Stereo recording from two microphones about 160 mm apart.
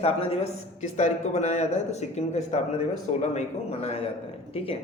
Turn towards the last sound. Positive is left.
turn(degrees=35)  # may be behind; listen again after turning